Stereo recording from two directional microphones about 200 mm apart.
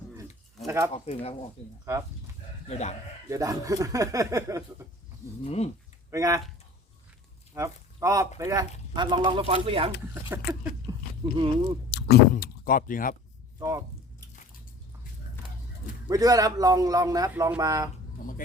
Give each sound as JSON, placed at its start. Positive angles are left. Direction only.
{"t": 0.9, "sound": "speech", "side_deg": 30}
{"t": 1.8, "sound": "a man's voice", "side_deg": -15}
{"t": 2.6, "sound": "speech", "side_deg": 35}
{"t": 3.2, "sound": "a man's voice", "side_deg": -15}
{"t": 5.5, "sound": "speech", "side_deg": 30}
{"t": 6.1, "sound": "speech", "side_deg": -15}
{"t": 7.5, "sound": "speech", "side_deg": -15}
{"t": 10.2, "sound": "a man's voice", "side_deg": -10}
{"t": 11.2, "sound": "speech", "side_deg": -25}
{"t": 11.9, "sound": "speech", "side_deg": 55}
{"t": 13.6, "sound": "a man's voice", "side_deg": -15}
{"t": 16.0, "sound": "a man's voice", "side_deg": -20}
{"t": 18.2, "sound": "speech", "side_deg": 45}